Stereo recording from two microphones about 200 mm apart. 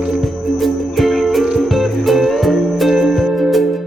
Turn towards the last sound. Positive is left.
turn(degrees=0)  # may be behind; listen again after turning